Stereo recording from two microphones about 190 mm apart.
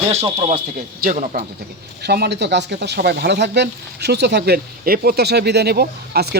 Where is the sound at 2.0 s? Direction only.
60° right (ahead or behind).